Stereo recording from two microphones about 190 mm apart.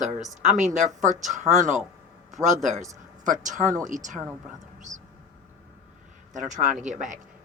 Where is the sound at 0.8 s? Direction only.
40° right (ahead or behind).